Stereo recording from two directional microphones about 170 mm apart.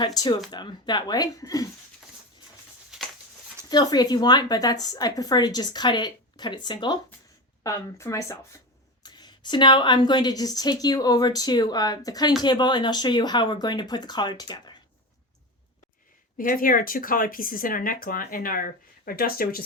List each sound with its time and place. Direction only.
0.0 s a woman's voice: 25° left (ahead or behind)
2.9 s a sound: 5° right (ahead or behind)
3.7 s a woman's voice: 25° left (ahead or behind)
16.4 s speech: 55° left (ahead or behind)